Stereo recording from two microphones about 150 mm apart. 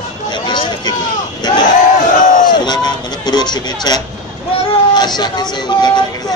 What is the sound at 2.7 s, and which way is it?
A man's voice, 30° left (ahead or behind).